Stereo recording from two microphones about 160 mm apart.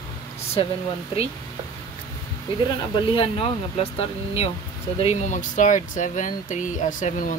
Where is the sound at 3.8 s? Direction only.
40° left (ahead or behind).